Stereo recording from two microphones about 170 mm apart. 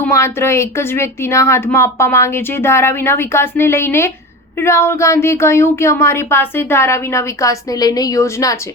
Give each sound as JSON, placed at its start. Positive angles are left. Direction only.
{"t": 0.0, "sound": "speech", "side_deg": 15}